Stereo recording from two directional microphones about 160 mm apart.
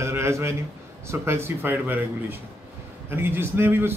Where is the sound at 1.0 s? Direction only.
15° right (ahead or behind).